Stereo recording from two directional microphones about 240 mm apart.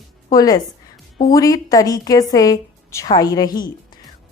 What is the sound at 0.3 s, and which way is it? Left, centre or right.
A woman's voice, centre.